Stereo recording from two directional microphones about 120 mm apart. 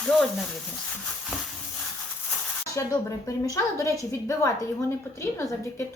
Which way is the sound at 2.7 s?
30° left (ahead or behind).